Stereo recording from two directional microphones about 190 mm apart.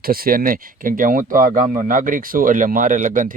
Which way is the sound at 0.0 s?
50° right (ahead or behind).